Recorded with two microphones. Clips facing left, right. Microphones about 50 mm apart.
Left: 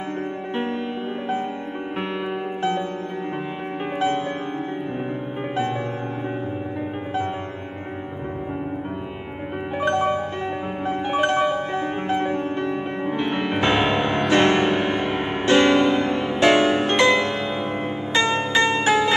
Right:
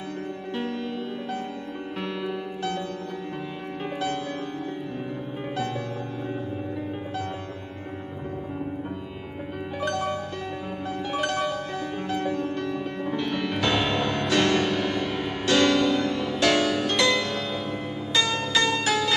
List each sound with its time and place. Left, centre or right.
9.8 s music: left